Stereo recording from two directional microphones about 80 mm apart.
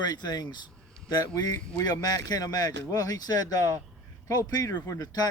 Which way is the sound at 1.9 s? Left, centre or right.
Left.